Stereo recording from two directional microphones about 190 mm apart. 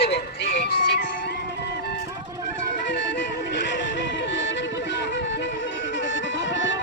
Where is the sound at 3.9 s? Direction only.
70° left (ahead or behind).